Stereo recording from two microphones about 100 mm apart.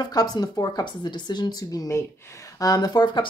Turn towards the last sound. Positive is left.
turn(degrees=50)  # may be behind; listen again after turning